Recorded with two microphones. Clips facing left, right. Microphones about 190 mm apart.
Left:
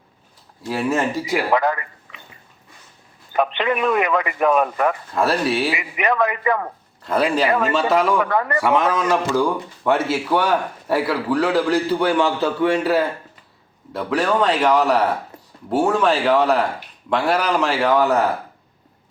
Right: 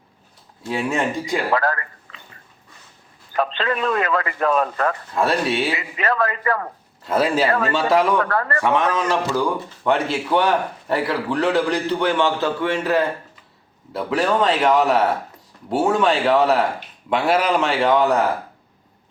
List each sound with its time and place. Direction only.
0.7 s a man's voice: centre (ahead or behind)
1.5 s a sound: 15° left (ahead or behind)
3.3 s a man's voice: 15° left (ahead or behind)
5.1 s a man's voice: centre (ahead or behind)
5.7 s a man's voice: 15° left (ahead or behind)
7.6 s a man's voice: centre (ahead or behind)
8.2 s a man's voice: 15° left (ahead or behind)
13.9 s a man's voice: centre (ahead or behind)